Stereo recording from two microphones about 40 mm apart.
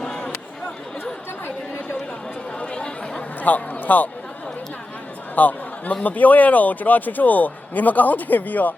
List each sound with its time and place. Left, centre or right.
2.6 s chatter: left
3.4 s a man's voice: left
5.3 s a sound: left
6.0 s speech: left